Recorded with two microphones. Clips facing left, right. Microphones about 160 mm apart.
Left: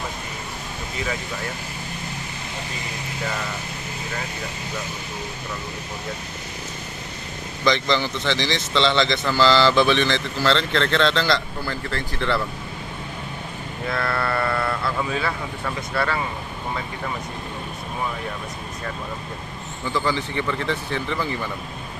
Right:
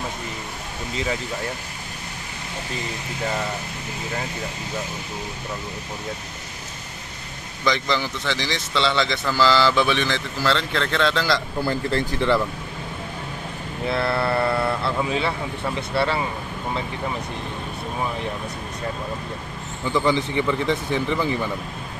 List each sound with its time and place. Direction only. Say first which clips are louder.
7.6 s speech: left 2 dB; 10° right (ahead or behind)
13.8 s speech: right 3 dB; 25° right (ahead or behind)
19.9 s speech: right 3 dB; 15° right (ahead or behind)